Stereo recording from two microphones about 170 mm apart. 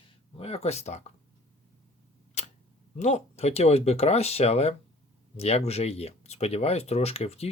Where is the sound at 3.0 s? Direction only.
40° left (ahead or behind).